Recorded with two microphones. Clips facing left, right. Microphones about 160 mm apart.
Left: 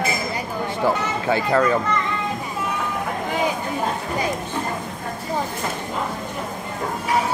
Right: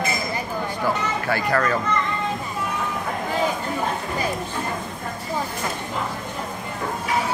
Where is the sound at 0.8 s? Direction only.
20° left (ahead or behind).